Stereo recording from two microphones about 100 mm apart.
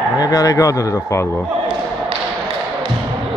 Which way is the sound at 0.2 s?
35° left (ahead or behind).